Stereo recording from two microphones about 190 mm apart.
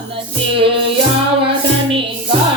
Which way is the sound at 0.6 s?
30° right (ahead or behind).